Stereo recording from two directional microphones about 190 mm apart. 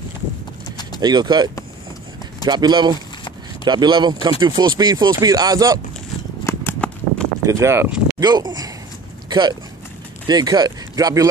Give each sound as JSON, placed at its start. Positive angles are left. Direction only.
{"t": 1.0, "sound": "speech", "side_deg": -20}
{"t": 6.4, "sound": "a sound", "side_deg": 10}
{"t": 7.4, "sound": "speech", "side_deg": -15}